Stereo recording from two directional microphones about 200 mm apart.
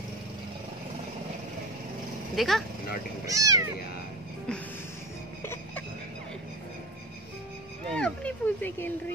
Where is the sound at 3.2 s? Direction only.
15° right (ahead or behind).